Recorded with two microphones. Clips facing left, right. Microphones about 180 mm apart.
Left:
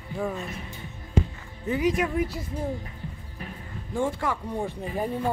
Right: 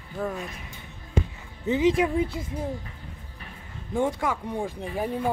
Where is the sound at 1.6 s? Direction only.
25° right (ahead or behind).